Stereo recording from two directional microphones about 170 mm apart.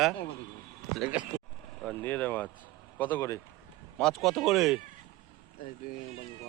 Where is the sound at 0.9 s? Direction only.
5° right (ahead or behind).